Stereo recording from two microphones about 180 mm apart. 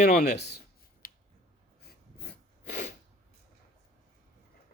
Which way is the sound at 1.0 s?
50° left (ahead or behind).